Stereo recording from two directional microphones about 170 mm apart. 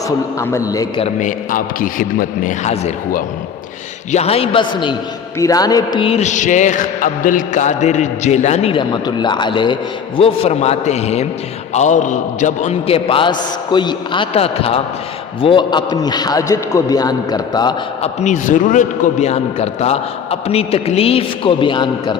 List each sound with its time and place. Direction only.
0.3 s a man's voice: 15° left (ahead or behind)
1.2 s a man's voice: 50° left (ahead or behind)
4.1 s a man's voice: 35° left (ahead or behind)
13.1 s a man's voice: 30° left (ahead or behind)
18.0 s a man's voice: 45° left (ahead or behind)